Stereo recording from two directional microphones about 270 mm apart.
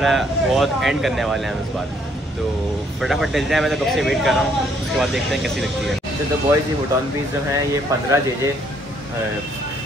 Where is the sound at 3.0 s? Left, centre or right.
Centre.